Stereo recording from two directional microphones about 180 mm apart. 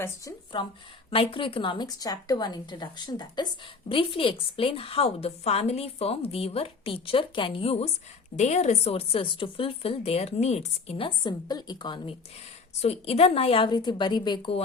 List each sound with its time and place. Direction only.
0.0 s a woman's voice: 25° left (ahead or behind)
12.8 s a woman's voice: 35° left (ahead or behind)